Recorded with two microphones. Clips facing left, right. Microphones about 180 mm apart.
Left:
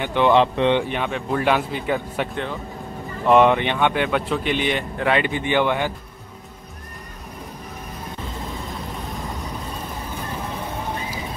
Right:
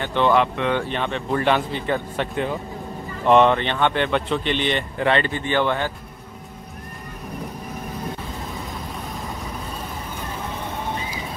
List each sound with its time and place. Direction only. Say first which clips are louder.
0.0 s speech: left 1 dB; 15° left (ahead or behind)
0.3 s speech: left 5 dB; 25° left (ahead or behind)
0.8 s speech: even; 10° left (ahead or behind)
3.3 s speech: even; 10° left (ahead or behind)